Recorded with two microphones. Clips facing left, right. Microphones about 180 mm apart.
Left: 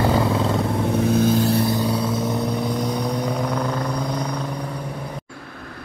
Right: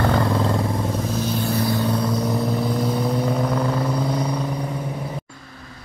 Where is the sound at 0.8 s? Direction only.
65° left (ahead or behind).